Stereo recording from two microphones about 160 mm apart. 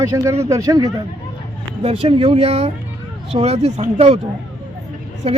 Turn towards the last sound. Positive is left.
turn(degrees=-40)  # may be behind; listen again after turning